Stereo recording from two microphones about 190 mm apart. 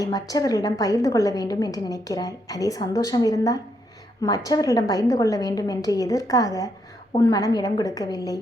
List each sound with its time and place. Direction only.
0.0 s a woman's voice: 20° left (ahead or behind)